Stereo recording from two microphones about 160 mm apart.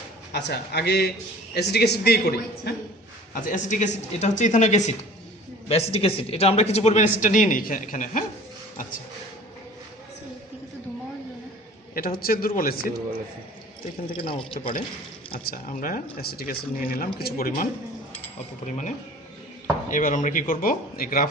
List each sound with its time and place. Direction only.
0.3 s a man's voice: 90° left
3.3 s speech: 55° left (ahead or behind)
11.9 s speech: 65° left (ahead or behind)
14.1 s a man's voice: 30° left (ahead or behind)
15.4 s speech: 60° left (ahead or behind)
16.1 s speech: 75° left (ahead or behind)
18.6 s speech: 50° left (ahead or behind); by 21.2 s 65° left (ahead or behind)